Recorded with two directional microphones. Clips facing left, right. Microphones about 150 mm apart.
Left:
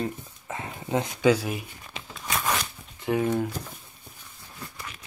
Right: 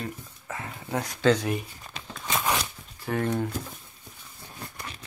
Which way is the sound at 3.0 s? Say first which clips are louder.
Left 3 dB; 5° left (ahead or behind).